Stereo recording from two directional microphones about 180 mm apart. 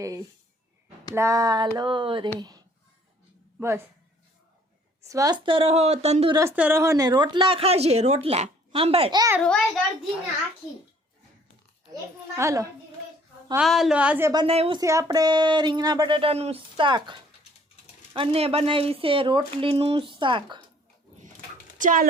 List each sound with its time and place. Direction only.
0.0 s speech: 20° right (ahead or behind)
2.4 s a sound: 20° right (ahead or behind)
3.6 s a woman's voice: 15° right (ahead or behind)
5.0 s speech: 20° right (ahead or behind); by 6.3 s 35° right (ahead or behind)
6.6 s speech: 10° right (ahead or behind); by 9.2 s 30° right (ahead or behind)
9.4 s a child's voice: 5° left (ahead or behind)
12.4 s a woman's voice: 20° right (ahead or behind)
13.6 s a woman's voice: centre (ahead or behind)
14.4 s speech: 30° right (ahead or behind)
14.8 s speech: 20° right (ahead or behind)
21.8 s speech: 45° right (ahead or behind)